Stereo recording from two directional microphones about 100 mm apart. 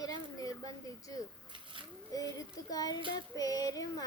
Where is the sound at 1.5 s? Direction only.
60° right (ahead or behind).